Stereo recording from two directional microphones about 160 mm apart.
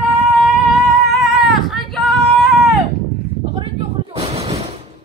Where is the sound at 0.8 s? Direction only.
Centre (ahead or behind).